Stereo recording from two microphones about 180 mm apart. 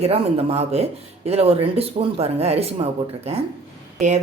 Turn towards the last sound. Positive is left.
turn(degrees=-40)  # may be behind; listen again after turning